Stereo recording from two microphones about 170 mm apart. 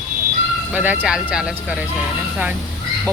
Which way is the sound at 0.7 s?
10° right (ahead or behind).